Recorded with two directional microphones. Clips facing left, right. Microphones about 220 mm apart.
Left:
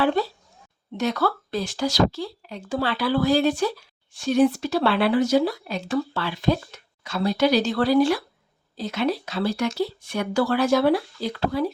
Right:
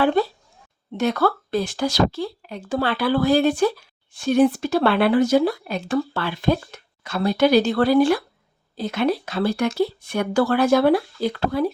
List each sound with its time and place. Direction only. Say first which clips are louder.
0.0 s speech: right 3 dB; 50° right (ahead or behind)